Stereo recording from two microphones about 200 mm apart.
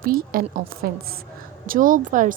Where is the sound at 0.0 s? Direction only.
45° right (ahead or behind).